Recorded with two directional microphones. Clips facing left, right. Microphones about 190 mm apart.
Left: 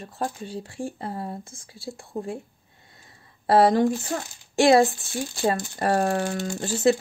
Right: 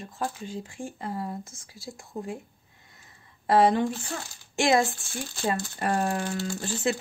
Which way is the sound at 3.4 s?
35° left (ahead or behind).